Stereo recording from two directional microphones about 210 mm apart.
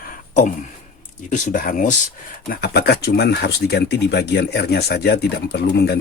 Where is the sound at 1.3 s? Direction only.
40° left (ahead or behind).